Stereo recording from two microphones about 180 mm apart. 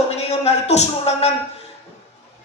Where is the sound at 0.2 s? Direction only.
35° left (ahead or behind).